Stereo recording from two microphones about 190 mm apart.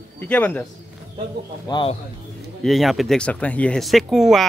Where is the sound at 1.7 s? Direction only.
25° left (ahead or behind).